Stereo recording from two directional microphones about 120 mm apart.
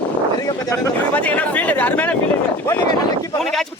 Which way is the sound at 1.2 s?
15° left (ahead or behind).